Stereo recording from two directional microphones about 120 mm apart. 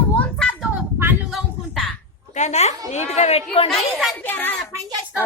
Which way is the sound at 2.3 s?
70° left (ahead or behind).